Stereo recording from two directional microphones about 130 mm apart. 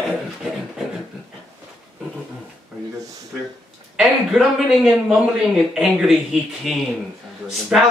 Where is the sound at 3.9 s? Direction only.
Centre (ahead or behind).